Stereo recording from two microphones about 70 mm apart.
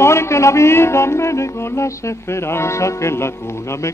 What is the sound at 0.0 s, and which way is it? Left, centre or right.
Music, left.